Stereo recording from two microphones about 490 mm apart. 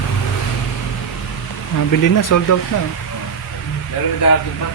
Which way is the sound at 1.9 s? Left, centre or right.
Left.